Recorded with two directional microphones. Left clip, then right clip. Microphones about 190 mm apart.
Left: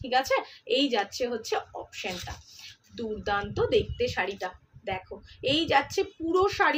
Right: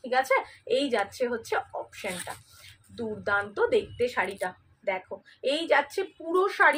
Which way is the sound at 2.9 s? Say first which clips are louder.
Right 2 dB; 20° left (ahead or behind).